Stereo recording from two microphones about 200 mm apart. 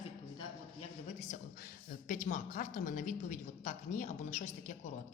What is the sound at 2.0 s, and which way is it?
A woman's voice, 40° left (ahead or behind).